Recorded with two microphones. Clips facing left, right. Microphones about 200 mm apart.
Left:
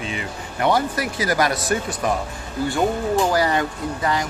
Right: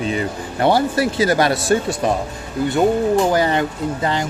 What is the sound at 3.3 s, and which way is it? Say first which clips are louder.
Speech: right 3 dB; 25° right (ahead or behind).